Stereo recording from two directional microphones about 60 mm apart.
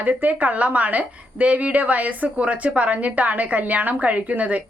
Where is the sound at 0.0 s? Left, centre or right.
Right.